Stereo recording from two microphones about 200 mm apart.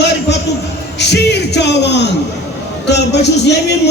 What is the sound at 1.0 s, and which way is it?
A man's voice, 60° left (ahead or behind).